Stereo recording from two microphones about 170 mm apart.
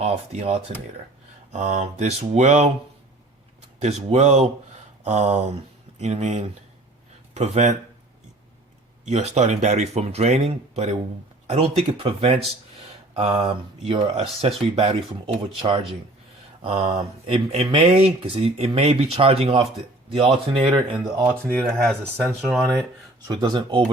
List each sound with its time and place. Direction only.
0.0 s speech: 40° right (ahead or behind)
3.8 s speech: 40° right (ahead or behind)
9.0 s speech: 40° right (ahead or behind)
16.6 s speech: 35° right (ahead or behind)
21.8 s speech: 5° left (ahead or behind)
23.2 s speech: 25° right (ahead or behind)